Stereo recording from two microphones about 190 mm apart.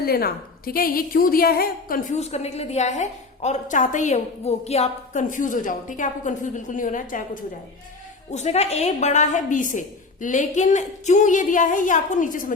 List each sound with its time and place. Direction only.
0.0 s a woman's voice: 55° left (ahead or behind)
8.3 s a woman's voice: 35° left (ahead or behind)